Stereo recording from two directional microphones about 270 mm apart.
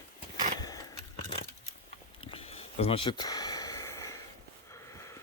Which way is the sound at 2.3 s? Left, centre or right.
Left.